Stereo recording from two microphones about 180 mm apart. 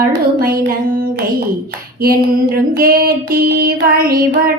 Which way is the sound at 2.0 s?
55° right (ahead or behind).